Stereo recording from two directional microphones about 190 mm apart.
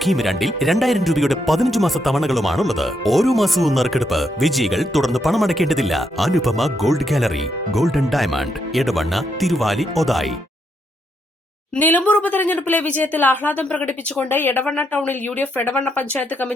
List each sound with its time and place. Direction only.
0.0 s speech: centre (ahead or behind)
11.8 s a woman's voice: 10° left (ahead or behind)